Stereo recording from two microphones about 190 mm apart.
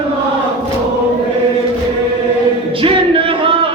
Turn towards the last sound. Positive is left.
turn(degrees=-30)  # may be behind; listen again after turning